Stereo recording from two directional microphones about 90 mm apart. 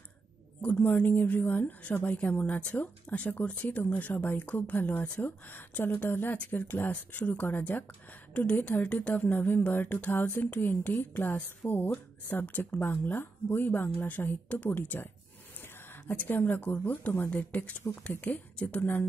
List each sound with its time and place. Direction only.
0.6 s a woman's voice: 15° left (ahead or behind)